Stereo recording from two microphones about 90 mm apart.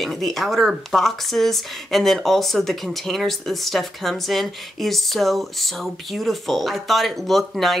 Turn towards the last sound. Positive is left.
turn(degrees=0)  # may be behind; listen again after turning